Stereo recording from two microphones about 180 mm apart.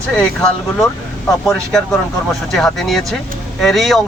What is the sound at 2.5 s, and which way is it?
Speech, 5° left (ahead or behind).